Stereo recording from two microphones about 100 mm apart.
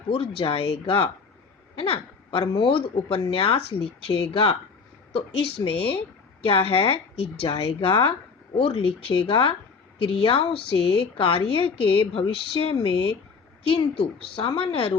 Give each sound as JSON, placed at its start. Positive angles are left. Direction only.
{"t": 0.1, "sound": "speech", "side_deg": 60}
{"t": 1.7, "sound": "a sound", "side_deg": 65}
{"t": 2.4, "sound": "speech", "side_deg": 40}
{"t": 2.6, "sound": "speech", "side_deg": 65}
{"t": 5.6, "sound": "speech", "side_deg": 40}
{"t": 6.4, "sound": "a woman's voice", "side_deg": 65}